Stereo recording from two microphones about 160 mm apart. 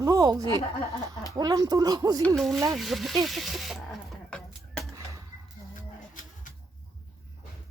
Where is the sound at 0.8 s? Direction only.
20° left (ahead or behind).